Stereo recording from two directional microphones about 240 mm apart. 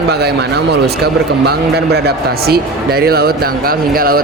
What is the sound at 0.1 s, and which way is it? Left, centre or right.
Speech, right.